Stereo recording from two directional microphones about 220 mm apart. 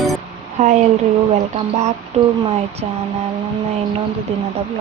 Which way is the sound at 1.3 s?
30° right (ahead or behind).